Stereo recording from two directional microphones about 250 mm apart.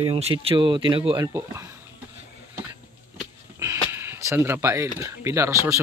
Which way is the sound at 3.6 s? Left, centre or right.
Centre.